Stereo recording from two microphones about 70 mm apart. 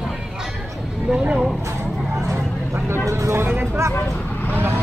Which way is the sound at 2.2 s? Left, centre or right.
Right.